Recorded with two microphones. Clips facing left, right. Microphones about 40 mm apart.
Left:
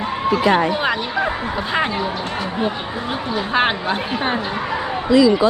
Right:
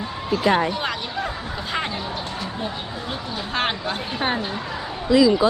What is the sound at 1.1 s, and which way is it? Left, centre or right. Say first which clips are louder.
Speech: left 7 dB; left.